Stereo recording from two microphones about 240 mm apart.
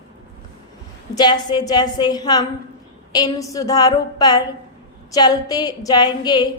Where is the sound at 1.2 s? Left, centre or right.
Centre.